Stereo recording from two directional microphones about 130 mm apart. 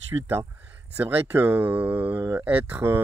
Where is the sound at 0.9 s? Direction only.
15° right (ahead or behind).